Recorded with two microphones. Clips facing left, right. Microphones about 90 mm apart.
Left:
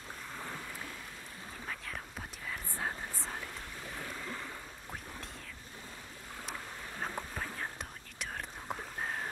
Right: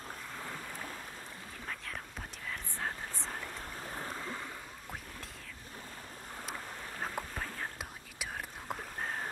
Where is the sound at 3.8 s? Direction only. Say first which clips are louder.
Right 2 dB; 40° right (ahead or behind).